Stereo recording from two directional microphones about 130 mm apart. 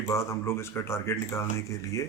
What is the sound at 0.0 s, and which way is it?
Speech, 20° left (ahead or behind).